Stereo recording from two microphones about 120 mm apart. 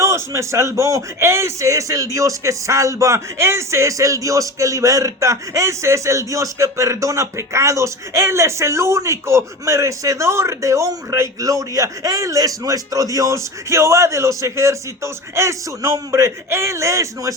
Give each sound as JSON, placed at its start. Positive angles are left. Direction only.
{"t": 0.0, "sound": "speech", "side_deg": -25}